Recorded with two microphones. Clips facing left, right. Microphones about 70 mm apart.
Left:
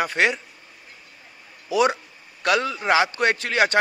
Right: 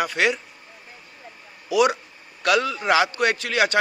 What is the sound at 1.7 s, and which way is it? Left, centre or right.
A man's voice, left.